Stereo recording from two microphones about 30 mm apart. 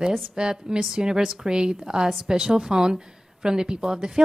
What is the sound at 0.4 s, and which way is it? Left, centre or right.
A woman's voice, right.